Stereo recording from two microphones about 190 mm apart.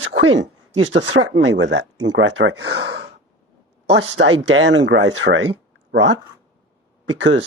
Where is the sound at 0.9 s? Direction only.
75° right (ahead or behind).